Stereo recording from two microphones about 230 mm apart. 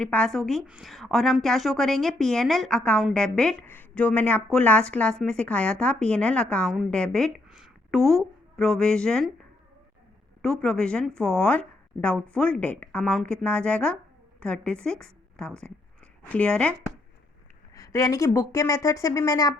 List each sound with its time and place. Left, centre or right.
0.0 s a woman's voice: centre
10.4 s a woman's voice: centre
17.7 s speech: centre